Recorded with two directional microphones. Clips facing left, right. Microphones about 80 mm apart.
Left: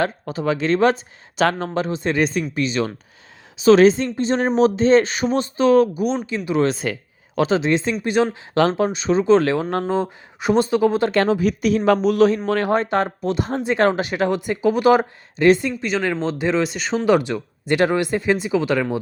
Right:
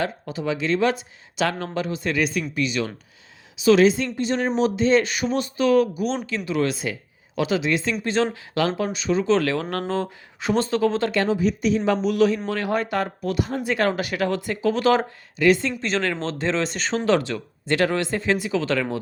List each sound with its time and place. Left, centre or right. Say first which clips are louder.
0.0 s speech: left 4 dB; left
6.7 s speech: left 4 dB; left; by 8.4 s centre
8.5 s speech: left 6 dB; left
8.9 s speech: left 5 dB; left
11.1 s speech: left 3 dB; left
12.0 s speech: left 4 dB; left; by 15.0 s centre
15.4 s speech: left 4 dB; left
15.8 s speech: left 3 dB; centre
17.1 s speech: left 4 dB; centre